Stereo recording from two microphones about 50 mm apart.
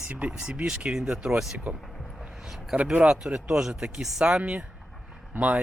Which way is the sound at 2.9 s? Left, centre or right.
Centre.